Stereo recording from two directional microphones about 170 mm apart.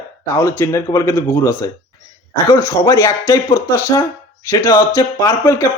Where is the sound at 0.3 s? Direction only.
15° left (ahead or behind).